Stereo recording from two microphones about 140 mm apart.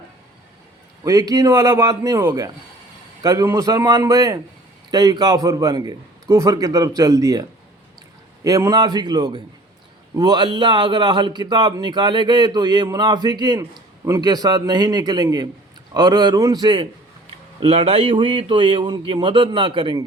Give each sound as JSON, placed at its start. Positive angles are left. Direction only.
{"t": 1.0, "sound": "a man's voice", "side_deg": -25}
{"t": 8.4, "sound": "a man's voice", "side_deg": -25}